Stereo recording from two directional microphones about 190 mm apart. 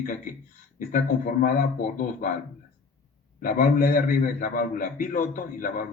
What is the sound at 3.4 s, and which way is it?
A man's voice, 45° left (ahead or behind).